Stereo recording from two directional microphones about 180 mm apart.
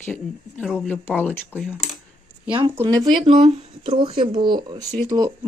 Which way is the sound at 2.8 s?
25° right (ahead or behind).